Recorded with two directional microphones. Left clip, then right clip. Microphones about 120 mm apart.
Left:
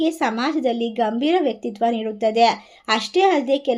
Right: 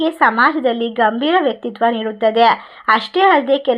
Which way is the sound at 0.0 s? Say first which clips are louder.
Right 8 dB; 15° left (ahead or behind).